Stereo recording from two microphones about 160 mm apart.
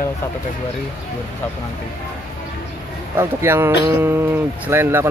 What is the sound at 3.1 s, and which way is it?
Speech, 15° right (ahead or behind).